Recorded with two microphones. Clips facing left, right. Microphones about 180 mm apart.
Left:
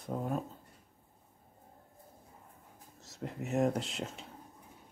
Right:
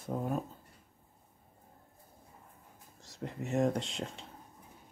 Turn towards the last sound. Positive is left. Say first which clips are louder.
# even
turn(degrees=5)  # may be behind; listen again after turning